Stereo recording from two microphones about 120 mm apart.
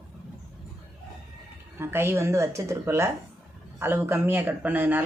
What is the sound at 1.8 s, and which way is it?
A woman's voice, 20° right (ahead or behind).